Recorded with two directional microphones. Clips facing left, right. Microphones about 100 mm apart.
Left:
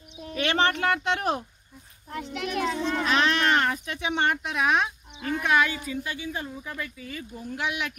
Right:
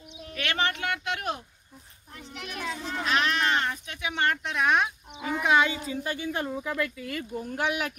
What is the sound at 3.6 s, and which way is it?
Speech, 55° left (ahead or behind).